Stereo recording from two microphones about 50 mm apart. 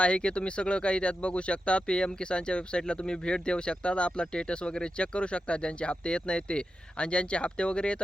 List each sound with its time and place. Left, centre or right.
0.0 s speech: left